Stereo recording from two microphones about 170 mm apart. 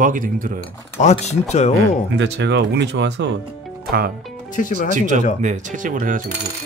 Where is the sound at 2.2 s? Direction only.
90° right.